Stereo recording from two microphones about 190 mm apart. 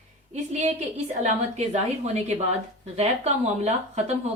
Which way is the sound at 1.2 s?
35° right (ahead or behind).